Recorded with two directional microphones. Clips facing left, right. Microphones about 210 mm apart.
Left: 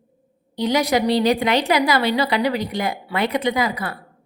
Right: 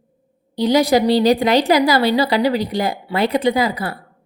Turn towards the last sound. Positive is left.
turn(degrees=-30)  # may be behind; listen again after turning